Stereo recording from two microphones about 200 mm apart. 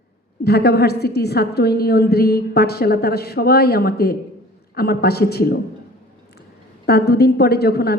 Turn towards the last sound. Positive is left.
turn(degrees=50)  # may be behind; listen again after turning